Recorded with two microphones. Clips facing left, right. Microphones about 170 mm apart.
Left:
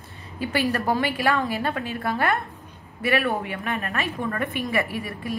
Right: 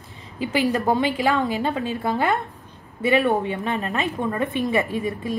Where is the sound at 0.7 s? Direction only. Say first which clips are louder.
Right 3 dB; 20° right (ahead or behind).